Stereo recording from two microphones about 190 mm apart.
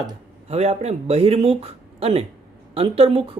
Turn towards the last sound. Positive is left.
turn(degrees=-30)  # may be behind; listen again after turning